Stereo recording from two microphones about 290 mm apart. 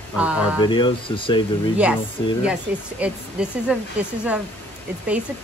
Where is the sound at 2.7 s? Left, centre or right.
Centre.